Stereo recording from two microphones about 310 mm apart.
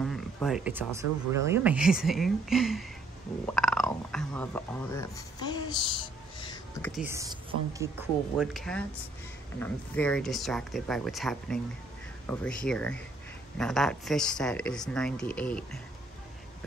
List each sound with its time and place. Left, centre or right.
0.0 s speech: centre
6.9 s speech: centre